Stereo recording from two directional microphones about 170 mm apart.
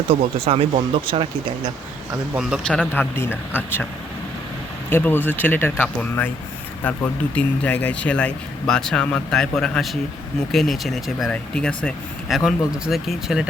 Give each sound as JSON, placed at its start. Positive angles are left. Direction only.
{"t": 0.1, "sound": "speech", "side_deg": -35}
{"t": 2.3, "sound": "speech", "side_deg": -5}
{"t": 4.9, "sound": "speech", "side_deg": 10}